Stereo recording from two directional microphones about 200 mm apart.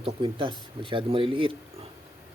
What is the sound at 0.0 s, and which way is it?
Speech, 25° right (ahead or behind).